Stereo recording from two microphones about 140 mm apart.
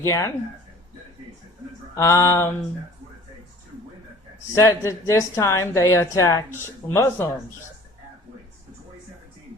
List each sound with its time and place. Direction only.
0.0 s a woman's voice: 25° left (ahead or behind)
2.0 s a woman's voice: 20° left (ahead or behind)
4.5 s a woman's voice: 20° left (ahead or behind)